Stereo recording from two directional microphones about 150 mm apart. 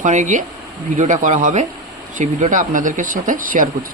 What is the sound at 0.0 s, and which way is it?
Speech, 55° right (ahead or behind).